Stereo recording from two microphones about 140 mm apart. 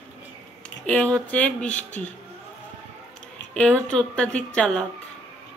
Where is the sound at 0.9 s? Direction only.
10° left (ahead or behind).